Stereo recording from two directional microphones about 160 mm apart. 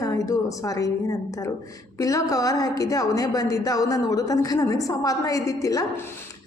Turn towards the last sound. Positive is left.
turn(degrees=20)  # may be behind; listen again after turning